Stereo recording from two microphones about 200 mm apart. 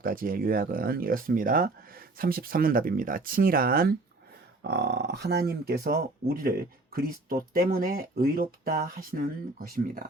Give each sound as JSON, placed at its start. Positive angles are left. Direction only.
{"t": 0.0, "sound": "speech", "side_deg": -45}